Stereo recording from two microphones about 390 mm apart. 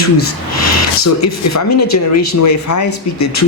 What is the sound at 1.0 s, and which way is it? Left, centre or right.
Speech, left.